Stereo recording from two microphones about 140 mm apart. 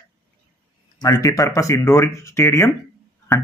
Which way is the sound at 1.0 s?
25° left (ahead or behind).